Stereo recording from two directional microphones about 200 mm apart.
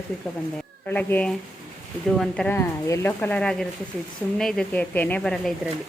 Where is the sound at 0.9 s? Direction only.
10° left (ahead or behind).